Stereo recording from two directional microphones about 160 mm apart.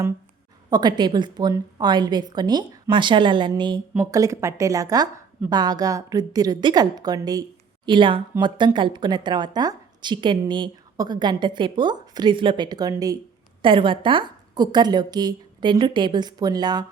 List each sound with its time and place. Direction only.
0.7 s speech: 25° right (ahead or behind)